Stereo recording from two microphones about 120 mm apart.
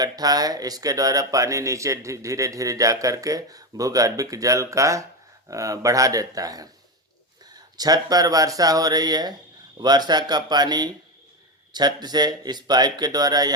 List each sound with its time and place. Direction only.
0.0 s speech: 30° right (ahead or behind)
7.8 s speech: 35° right (ahead or behind)